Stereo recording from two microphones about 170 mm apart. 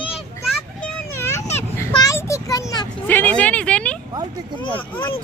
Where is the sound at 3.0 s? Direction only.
10° left (ahead or behind).